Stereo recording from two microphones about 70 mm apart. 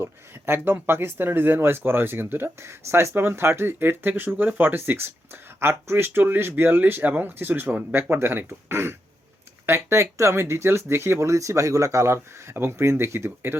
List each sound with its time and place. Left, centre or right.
0.0 s speech: right